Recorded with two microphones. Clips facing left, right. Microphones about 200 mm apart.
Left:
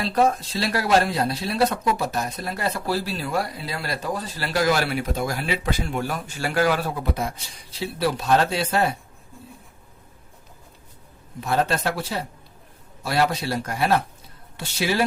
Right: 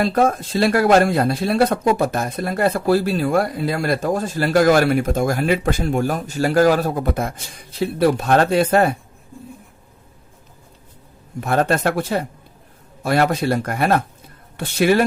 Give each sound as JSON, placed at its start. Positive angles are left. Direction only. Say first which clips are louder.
{"t": 0.0, "sound": "a man's voice", "louder": "right 4 dB", "side_deg": -50}
{"t": 11.3, "sound": "a man's voice", "louder": "right 5 dB", "side_deg": -55}